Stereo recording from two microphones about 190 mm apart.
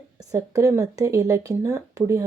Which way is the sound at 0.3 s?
15° right (ahead or behind).